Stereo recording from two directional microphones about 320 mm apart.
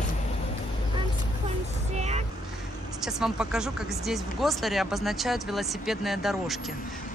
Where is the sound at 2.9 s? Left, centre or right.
Centre.